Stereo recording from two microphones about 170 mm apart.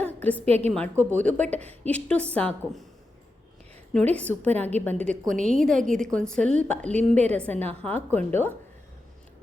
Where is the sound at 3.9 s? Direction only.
10° left (ahead or behind).